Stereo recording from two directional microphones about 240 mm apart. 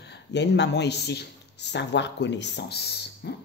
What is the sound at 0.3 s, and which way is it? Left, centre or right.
Speech, left.